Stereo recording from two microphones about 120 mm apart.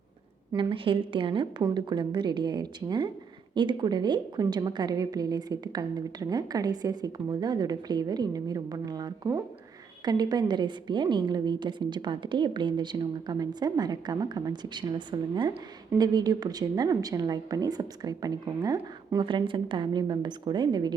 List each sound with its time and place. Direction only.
0.5 s a woman's voice: 45° right (ahead or behind)